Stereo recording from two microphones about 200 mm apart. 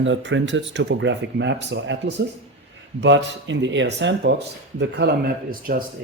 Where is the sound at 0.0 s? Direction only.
65° right (ahead or behind); by 5.7 s 50° right (ahead or behind).